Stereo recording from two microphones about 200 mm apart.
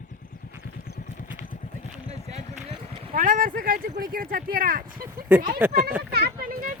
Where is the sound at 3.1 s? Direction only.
45° right (ahead or behind).